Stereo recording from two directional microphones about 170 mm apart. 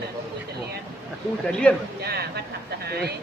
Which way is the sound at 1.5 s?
5° left (ahead or behind).